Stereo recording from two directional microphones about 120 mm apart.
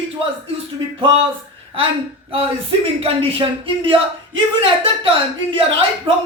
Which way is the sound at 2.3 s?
55° right (ahead or behind).